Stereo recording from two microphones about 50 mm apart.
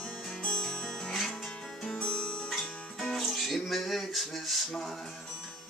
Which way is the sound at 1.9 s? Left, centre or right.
Left.